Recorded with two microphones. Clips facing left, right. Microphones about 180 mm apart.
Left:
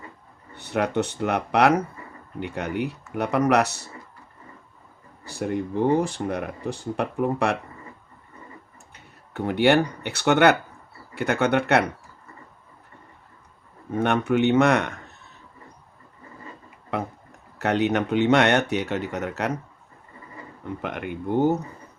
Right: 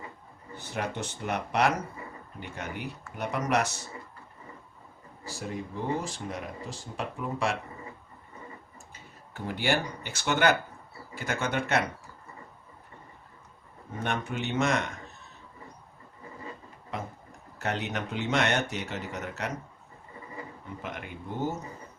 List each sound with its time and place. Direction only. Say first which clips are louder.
0.5 s speech: left 10 dB; 65° left (ahead or behind)
5.2 s speech: left 9 dB; 65° left (ahead or behind)
8.9 s speech: left 7 dB; 65° left (ahead or behind)
14.0 s speech: left 11 dB; 65° left (ahead or behind)
16.9 s speech: left 8 dB; 65° left (ahead or behind)
20.8 s speech: left 9 dB; 60° left (ahead or behind)